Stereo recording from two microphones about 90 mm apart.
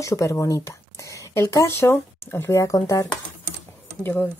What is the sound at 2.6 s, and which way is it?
Speech, 40° left (ahead or behind).